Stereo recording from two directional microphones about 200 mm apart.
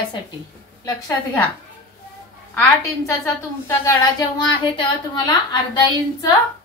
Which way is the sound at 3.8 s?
20° left (ahead or behind).